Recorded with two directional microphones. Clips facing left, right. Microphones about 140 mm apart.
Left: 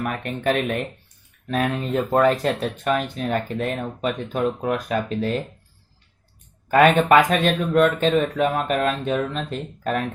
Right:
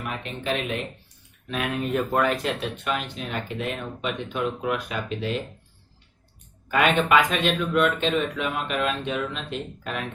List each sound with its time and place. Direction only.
0.0 s speech: 50° left (ahead or behind)
1.5 s speech: 40° left (ahead or behind)
6.7 s speech: 40° left (ahead or behind)